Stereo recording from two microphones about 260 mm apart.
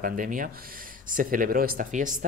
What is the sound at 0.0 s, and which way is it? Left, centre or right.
Speech, right.